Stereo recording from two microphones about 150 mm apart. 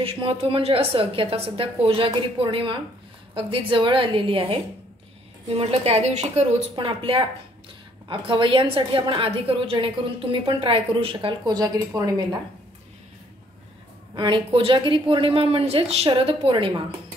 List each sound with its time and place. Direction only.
0.0 s a woman's voice: 35° right (ahead or behind)
6.7 s a woman's voice: 35° right (ahead or behind)
14.1 s a woman's voice: 35° right (ahead or behind)